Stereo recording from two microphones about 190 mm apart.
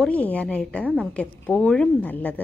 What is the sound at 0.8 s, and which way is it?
Speech, 5° right (ahead or behind).